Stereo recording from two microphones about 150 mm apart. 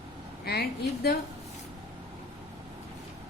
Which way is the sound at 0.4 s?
90° left.